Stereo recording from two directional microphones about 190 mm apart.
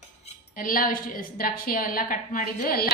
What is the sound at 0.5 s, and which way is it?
A woman's voice, 45° left (ahead or behind).